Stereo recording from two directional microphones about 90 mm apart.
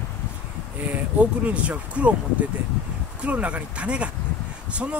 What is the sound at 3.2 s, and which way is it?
Speech, 15° right (ahead or behind).